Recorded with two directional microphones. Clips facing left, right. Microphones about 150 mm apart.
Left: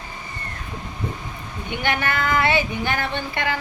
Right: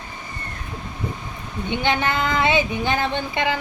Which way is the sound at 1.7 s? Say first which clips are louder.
Right 2 dB; 20° right (ahead or behind).